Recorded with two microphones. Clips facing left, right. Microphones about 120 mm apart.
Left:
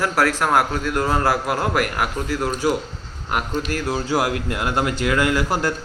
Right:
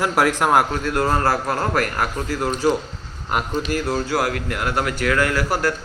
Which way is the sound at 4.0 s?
15° left (ahead or behind).